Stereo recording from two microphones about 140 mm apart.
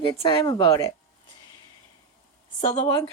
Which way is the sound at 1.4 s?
35° left (ahead or behind).